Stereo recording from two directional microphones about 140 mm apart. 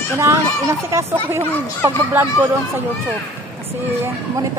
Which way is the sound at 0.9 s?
20° right (ahead or behind).